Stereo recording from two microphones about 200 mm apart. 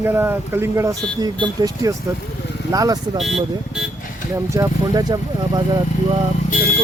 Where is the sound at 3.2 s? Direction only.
Centre (ahead or behind).